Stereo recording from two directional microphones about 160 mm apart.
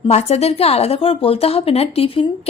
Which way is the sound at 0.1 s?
40° left (ahead or behind).